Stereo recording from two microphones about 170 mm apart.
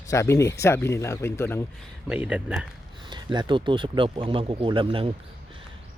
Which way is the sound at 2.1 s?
5° right (ahead or behind).